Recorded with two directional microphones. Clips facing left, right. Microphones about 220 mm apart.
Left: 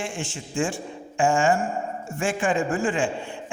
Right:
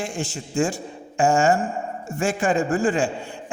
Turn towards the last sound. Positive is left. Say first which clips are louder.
# right 3 dB
turn(degrees=-40)  # may be behind; listen again after turning